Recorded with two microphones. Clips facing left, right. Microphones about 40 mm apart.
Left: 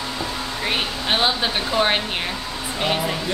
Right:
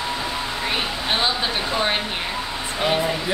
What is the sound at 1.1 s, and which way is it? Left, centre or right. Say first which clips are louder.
Speech: left 2 dB; centre.